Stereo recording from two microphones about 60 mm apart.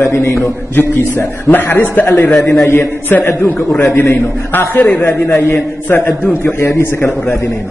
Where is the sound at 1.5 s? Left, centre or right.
Left.